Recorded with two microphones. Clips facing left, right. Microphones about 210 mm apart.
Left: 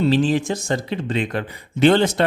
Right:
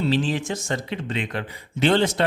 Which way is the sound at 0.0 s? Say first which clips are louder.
Left 5 dB; 45° left (ahead or behind).